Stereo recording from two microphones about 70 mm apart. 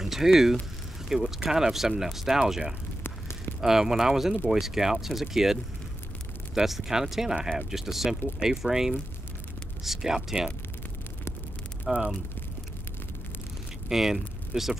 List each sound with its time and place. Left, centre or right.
0.0 s speech: centre
3.0 s a sound: left
3.6 s speech: centre
11.9 s speech: centre
13.8 s speech: centre